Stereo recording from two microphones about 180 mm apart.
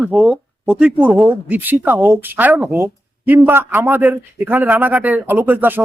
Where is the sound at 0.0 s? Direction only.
5° right (ahead or behind).